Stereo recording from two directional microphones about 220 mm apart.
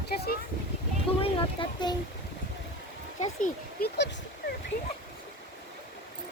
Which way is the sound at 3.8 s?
45° left (ahead or behind).